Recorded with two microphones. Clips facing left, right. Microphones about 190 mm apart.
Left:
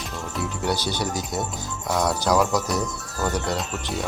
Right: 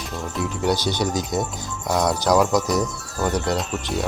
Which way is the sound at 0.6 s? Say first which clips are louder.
Right 4 dB; 15° right (ahead or behind).